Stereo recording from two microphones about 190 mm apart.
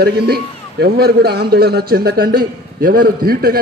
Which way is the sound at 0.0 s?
55° right (ahead or behind).